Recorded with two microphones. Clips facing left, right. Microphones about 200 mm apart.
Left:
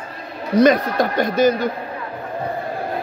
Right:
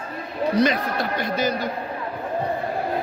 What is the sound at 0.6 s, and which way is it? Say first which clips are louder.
A man's voice: left 8 dB; 45° left (ahead or behind).